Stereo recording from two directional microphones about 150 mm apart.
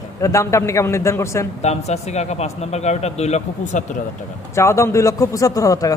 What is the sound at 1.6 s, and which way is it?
A man's voice, 45° left (ahead or behind).